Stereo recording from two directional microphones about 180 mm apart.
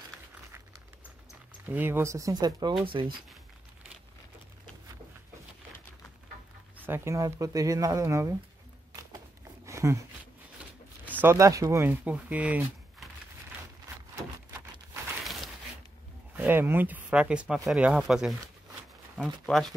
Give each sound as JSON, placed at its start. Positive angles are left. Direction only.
{"t": 1.7, "sound": "speech", "side_deg": -10}
{"t": 6.9, "sound": "speech", "side_deg": -15}
{"t": 9.7, "sound": "a sound", "side_deg": -15}
{"t": 11.1, "sound": "speech", "side_deg": -15}
{"t": 16.3, "sound": "speech", "side_deg": -10}